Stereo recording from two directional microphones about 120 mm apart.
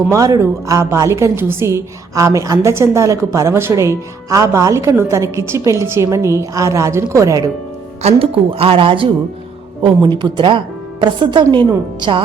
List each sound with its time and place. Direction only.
0.1 s a woman's voice: 25° right (ahead or behind)
8.0 s a woman's voice: 50° right (ahead or behind)